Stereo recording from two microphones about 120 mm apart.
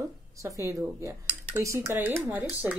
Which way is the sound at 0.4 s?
25° right (ahead or behind).